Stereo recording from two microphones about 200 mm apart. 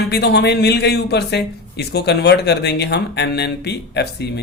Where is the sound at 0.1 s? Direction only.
55° left (ahead or behind).